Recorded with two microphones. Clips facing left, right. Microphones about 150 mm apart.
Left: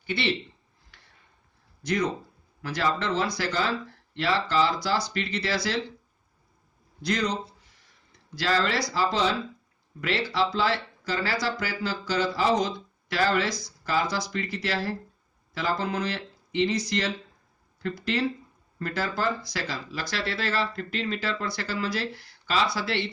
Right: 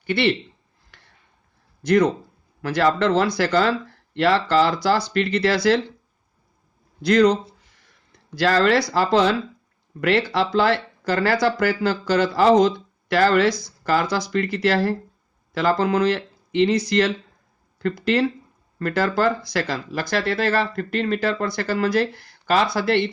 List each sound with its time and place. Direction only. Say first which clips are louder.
0.0 s speech: right 8 dB; 60° right (ahead or behind)
1.8 s speech: right 9 dB; 60° right (ahead or behind)
7.0 s speech: right 12 dB; 65° right (ahead or behind)
8.4 s speech: right 8 dB; 60° right (ahead or behind)